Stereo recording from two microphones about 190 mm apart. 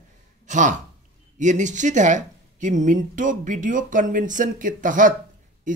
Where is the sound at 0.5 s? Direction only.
40° right (ahead or behind).